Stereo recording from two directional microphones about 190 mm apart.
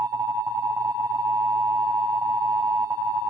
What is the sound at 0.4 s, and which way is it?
Busy signal, 20° right (ahead or behind).